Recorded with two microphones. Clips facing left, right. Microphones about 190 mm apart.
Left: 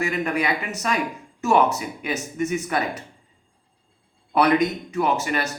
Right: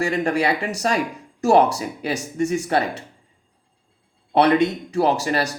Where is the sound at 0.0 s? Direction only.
30° right (ahead or behind).